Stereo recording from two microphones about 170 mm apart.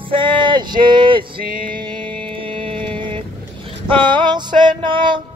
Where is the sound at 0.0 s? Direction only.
30° right (ahead or behind).